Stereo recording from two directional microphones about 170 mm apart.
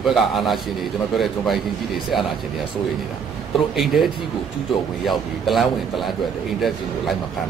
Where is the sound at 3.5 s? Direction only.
Centre (ahead or behind).